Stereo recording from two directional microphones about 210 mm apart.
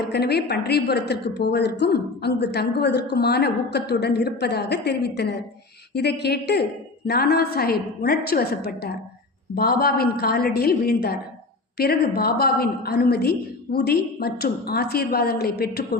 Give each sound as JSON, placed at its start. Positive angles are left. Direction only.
{"t": 0.1, "sound": "a woman's voice", "side_deg": 50}